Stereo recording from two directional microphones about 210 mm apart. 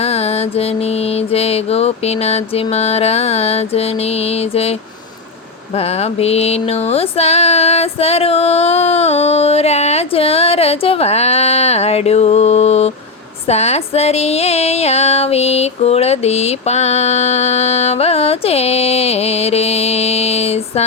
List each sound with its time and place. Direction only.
0.0 s female singing: 30° left (ahead or behind)
5.7 s a sound: 30° left (ahead or behind)
13.5 s female singing: 30° left (ahead or behind)